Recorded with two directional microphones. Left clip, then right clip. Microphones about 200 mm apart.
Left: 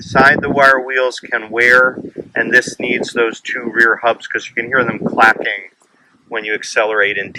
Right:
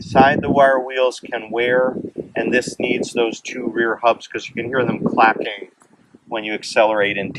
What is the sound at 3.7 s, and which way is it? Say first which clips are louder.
Speech: left 5 dB; 5° right (ahead or behind).